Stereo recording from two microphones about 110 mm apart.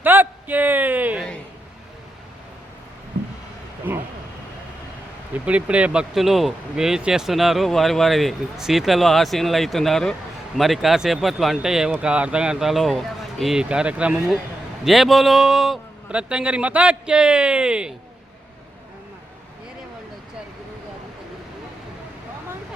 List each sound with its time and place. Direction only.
0.0 s a sound: 15° right (ahead or behind)
3.9 s vehicle: 15° right (ahead or behind)
5.5 s speech: 10° right (ahead or behind)
14.8 s a man's voice: centre (ahead or behind)